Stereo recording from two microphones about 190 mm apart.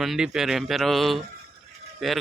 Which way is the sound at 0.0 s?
Centre (ahead or behind).